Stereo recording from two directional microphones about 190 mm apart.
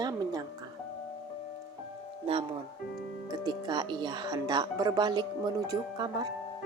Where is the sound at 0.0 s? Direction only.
20° right (ahead or behind).